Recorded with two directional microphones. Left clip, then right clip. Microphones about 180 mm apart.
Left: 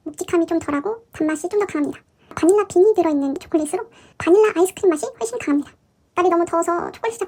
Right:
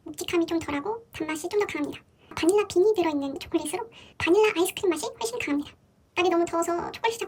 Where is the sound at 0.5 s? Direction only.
40° right (ahead or behind).